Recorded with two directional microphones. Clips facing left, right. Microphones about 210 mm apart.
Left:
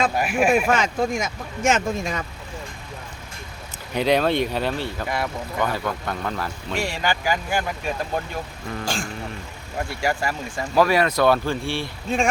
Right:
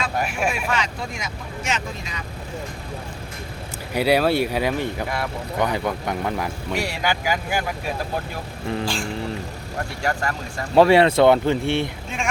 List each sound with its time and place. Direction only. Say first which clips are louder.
0.2 s speech: left 1 dB; 5° left (ahead or behind)
0.5 s speech: left 6 dB; 45° left (ahead or behind)
3.9 s speech: right 1 dB; 10° right (ahead or behind)
5.0 s speech: left 1 dB; centre (ahead or behind)
5.5 s speech: right 2 dB; 15° right (ahead or behind)
8.8 s speech: left 1 dB; 45° left (ahead or behind)
10.0 s speech: even; 10° left (ahead or behind)
10.8 s speech: right 5 dB; 25° right (ahead or behind)
12.1 s speech: left 7 dB; 35° left (ahead or behind)